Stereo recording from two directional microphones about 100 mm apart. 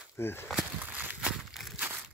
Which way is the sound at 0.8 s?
20° right (ahead or behind).